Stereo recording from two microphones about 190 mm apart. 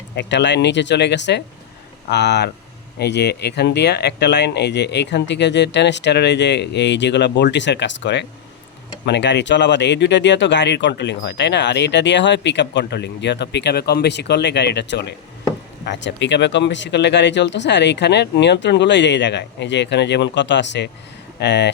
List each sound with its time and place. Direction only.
0.2 s speech: 65° left (ahead or behind)